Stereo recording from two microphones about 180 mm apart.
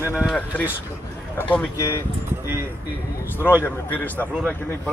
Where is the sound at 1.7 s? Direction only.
20° left (ahead or behind).